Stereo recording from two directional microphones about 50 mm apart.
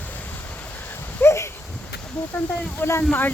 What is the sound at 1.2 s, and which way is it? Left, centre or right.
Dog, left.